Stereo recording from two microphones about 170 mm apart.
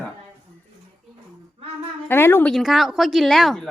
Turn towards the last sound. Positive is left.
turn(degrees=0)  # may be behind; listen again after turning